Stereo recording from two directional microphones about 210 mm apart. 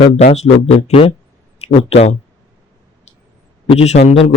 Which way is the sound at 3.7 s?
30° left (ahead or behind).